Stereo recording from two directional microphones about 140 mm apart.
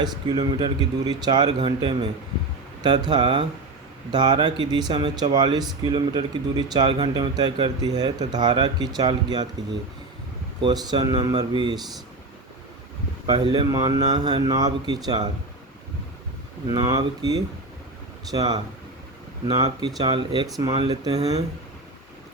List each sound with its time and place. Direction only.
0.0 s speech: 30° right (ahead or behind)
10.6 s speech: 30° right (ahead or behind)
13.2 s speech: 30° right (ahead or behind)
16.7 s speech: 30° right (ahead or behind)
18.3 s speech: 30° right (ahead or behind)